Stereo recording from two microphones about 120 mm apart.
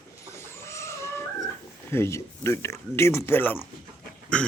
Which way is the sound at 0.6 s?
25° left (ahead or behind).